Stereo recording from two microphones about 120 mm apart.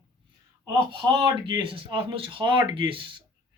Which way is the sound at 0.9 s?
45° right (ahead or behind).